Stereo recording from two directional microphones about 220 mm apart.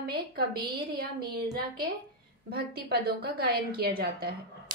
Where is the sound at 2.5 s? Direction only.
45° right (ahead or behind).